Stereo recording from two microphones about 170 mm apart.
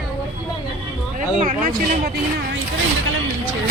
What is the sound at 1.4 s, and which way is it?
Speech, 50° right (ahead or behind).